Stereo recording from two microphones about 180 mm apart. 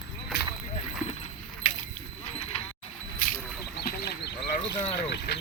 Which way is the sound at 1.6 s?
45° left (ahead or behind).